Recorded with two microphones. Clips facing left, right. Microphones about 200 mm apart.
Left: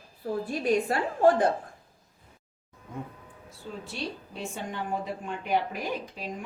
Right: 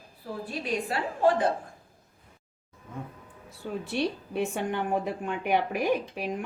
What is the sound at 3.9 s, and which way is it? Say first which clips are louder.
A woman's voice: right 9 dB; 60° right (ahead or behind).